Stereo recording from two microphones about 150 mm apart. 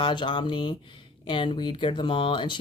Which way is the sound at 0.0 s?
35° left (ahead or behind).